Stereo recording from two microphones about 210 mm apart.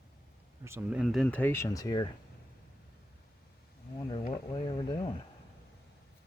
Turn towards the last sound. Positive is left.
turn(degrees=20)  # may be behind; listen again after turning